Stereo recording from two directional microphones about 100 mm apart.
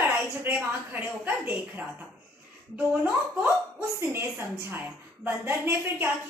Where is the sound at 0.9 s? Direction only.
20° right (ahead or behind).